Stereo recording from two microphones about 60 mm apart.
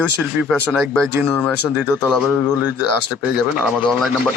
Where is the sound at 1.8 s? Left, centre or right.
Right.